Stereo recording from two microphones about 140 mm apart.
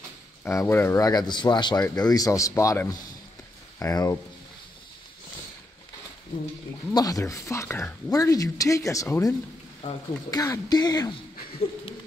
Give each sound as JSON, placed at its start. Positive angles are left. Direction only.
{"t": 0.4, "sound": "speech", "side_deg": 15}
{"t": 6.9, "sound": "speech", "side_deg": 25}
{"t": 9.8, "sound": "speech", "side_deg": 55}
{"t": 10.3, "sound": "speech", "side_deg": 25}